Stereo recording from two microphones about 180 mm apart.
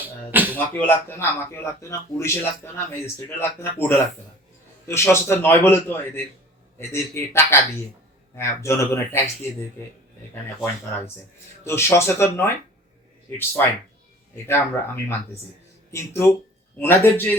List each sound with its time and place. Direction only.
0.0 s music: 10° right (ahead or behind)
0.5 s speech: 10° left (ahead or behind)
11.6 s speech: 15° left (ahead or behind)